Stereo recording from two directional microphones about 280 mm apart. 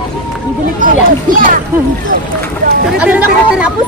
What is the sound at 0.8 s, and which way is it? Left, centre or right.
Speech, right.